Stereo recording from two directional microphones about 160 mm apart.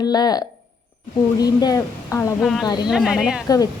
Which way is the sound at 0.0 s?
25° left (ahead or behind).